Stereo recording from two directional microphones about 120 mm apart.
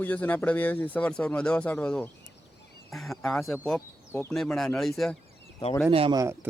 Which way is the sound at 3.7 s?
20° left (ahead or behind).